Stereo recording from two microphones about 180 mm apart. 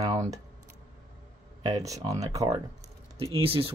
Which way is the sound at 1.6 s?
20° right (ahead or behind).